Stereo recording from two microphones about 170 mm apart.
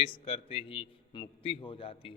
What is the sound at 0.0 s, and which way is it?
A man's voice, 30° left (ahead or behind).